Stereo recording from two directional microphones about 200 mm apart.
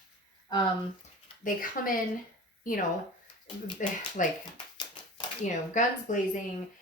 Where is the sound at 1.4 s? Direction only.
45° left (ahead or behind).